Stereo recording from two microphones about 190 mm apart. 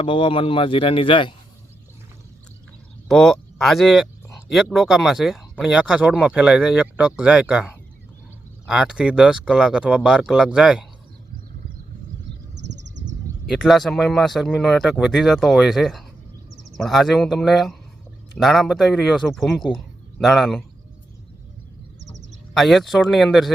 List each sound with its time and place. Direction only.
0.0 s speech: 30° left (ahead or behind)
3.1 s speech: centre (ahead or behind)
13.4 s speech: centre (ahead or behind)
22.5 s speech: centre (ahead or behind)